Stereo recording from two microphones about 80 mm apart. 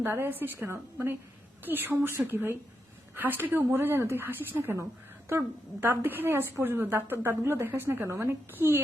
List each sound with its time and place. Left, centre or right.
0.0 s a woman's voice: right
5.8 s a woman's voice: right